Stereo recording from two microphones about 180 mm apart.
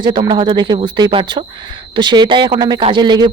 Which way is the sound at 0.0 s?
25° right (ahead or behind).